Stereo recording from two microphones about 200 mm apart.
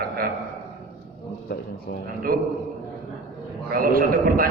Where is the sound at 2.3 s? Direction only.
45° right (ahead or behind).